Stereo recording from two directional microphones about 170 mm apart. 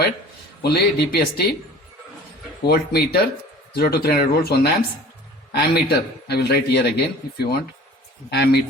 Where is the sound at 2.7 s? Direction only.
70° left (ahead or behind).